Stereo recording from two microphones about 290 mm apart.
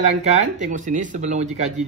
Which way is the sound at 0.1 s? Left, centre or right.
Right.